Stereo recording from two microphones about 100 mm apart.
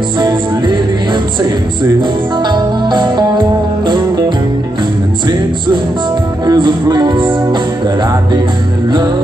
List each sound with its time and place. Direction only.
0.2 s music: 50° right (ahead or behind)
2.0 s music: 45° right (ahead or behind)
6.4 s music: 45° right (ahead or behind)